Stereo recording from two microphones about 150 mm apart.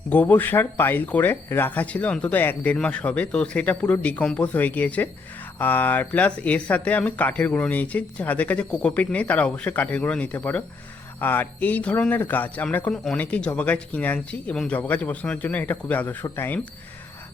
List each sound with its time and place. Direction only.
0.1 s speech: 10° left (ahead or behind)